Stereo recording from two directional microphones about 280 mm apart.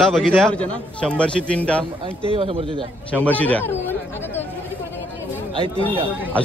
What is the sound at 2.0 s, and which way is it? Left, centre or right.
Speech, centre.